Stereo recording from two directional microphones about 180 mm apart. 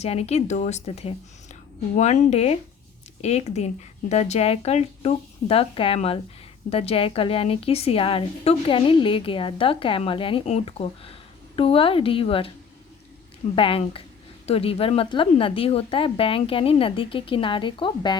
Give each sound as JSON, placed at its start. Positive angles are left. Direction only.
{"t": 0.0, "sound": "a woman's voice", "side_deg": 35}
{"t": 13.6, "sound": "a woman's voice", "side_deg": 30}